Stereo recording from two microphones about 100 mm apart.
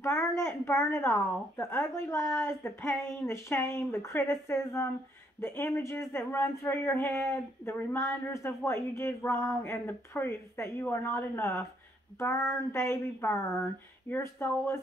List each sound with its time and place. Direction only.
0.0 s a woman's voice: 25° left (ahead or behind)